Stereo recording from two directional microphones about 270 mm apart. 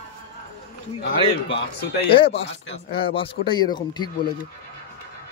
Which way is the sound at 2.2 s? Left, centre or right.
Left.